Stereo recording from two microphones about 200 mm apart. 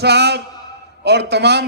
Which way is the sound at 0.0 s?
55° right (ahead or behind).